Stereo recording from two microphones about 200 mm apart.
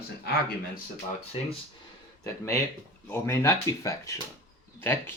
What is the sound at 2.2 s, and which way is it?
Speech, 15° left (ahead or behind).